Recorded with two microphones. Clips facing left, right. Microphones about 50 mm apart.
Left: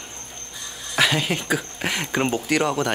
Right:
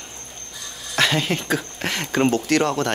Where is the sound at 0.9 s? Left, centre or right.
Centre.